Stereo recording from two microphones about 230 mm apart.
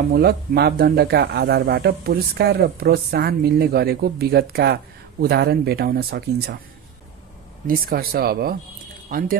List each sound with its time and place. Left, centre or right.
0.1 s speech: right
7.6 s speech: right